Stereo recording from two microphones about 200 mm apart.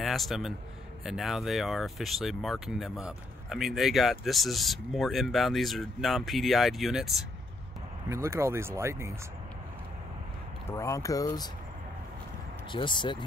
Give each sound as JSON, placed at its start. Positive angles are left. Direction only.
{"t": 0.0, "sound": "a man's voice", "side_deg": 0}
{"t": 8.1, "sound": "speech", "side_deg": -15}
{"t": 10.7, "sound": "speech", "side_deg": 15}
{"t": 12.7, "sound": "speech", "side_deg": 25}